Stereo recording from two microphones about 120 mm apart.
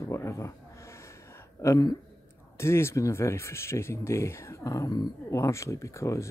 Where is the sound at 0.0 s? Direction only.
25° left (ahead or behind).